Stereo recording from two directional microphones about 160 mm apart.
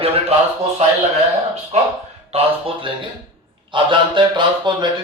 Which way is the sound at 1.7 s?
45° right (ahead or behind).